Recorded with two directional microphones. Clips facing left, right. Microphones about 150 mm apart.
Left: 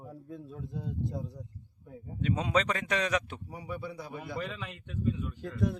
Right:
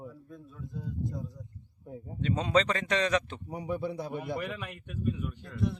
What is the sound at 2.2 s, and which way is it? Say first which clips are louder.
Speech: right 2 dB; 10° left (ahead or behind).